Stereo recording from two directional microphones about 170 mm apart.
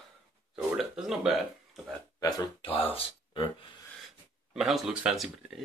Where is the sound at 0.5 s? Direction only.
5° right (ahead or behind).